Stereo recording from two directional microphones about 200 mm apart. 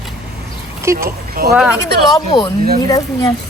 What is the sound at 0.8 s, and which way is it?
Speech, 15° right (ahead or behind).